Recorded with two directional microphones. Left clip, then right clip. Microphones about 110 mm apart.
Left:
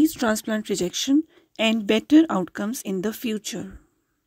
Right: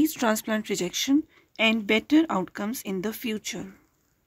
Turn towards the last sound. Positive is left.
turn(degrees=50)  # may be behind; listen again after turning